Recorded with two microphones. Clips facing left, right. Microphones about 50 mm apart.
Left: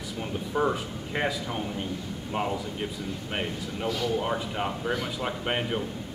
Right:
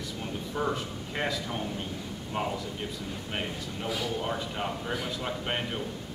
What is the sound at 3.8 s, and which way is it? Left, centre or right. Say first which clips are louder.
Speech: left 4 dB; centre.